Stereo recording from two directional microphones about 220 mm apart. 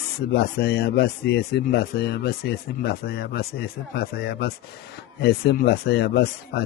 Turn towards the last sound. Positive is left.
turn(degrees=45)  # may be behind; listen again after turning